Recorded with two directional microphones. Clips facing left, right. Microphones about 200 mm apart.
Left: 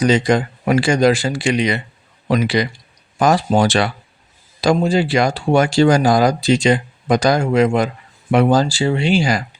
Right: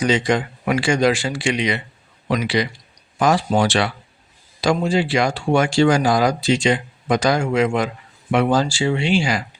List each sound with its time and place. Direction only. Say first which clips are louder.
0.0 s a man's voice: left 4 dB; 40° left (ahead or behind)